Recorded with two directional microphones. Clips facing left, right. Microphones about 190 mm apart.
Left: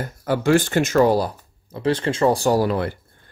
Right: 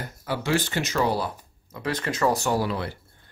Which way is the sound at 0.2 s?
50° left (ahead or behind).